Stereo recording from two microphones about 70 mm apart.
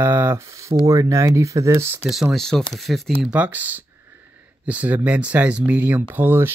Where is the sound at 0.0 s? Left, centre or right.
Right.